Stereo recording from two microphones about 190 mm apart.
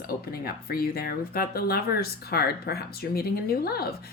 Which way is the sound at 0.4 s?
55° left (ahead or behind).